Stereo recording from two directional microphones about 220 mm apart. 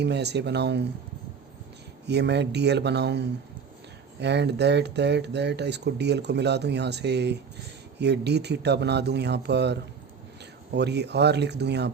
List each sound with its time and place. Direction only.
0.0 s speech: 50° right (ahead or behind)
2.0 s speech: 50° right (ahead or behind)